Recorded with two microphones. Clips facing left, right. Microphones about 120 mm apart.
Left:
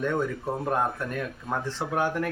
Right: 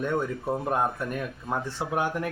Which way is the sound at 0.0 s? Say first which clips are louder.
Even; 15° right (ahead or behind).